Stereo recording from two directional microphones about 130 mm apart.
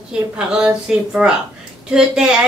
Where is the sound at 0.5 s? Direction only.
5° right (ahead or behind).